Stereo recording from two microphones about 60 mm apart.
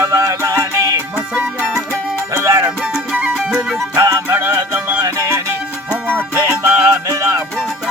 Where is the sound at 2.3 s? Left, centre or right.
Right.